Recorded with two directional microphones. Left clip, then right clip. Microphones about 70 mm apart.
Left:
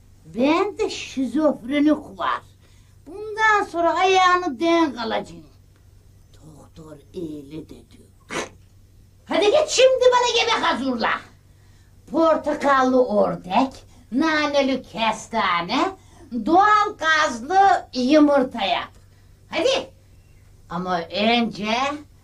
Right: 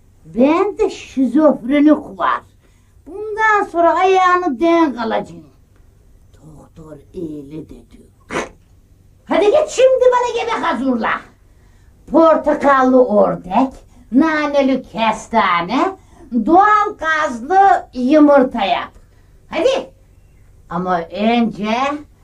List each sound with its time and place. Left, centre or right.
0.3 s a woman's voice: left
2.1 s child singing: left
3.1 s a woman's voice: left
7.0 s speech: left
7.2 s speech: left
9.2 s a sound: left
10.2 s a woman's voice: left
12.4 s a woman's voice: left
13.7 s a woman's voice: centre
17.0 s child singing: left
17.4 s a woman's voice: left